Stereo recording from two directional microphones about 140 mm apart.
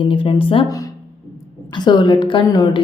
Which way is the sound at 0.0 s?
40° left (ahead or behind).